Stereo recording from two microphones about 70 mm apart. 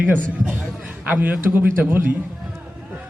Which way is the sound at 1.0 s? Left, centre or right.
Right.